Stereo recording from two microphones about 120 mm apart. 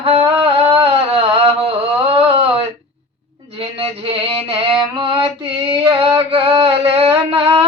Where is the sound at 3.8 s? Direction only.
50° right (ahead or behind).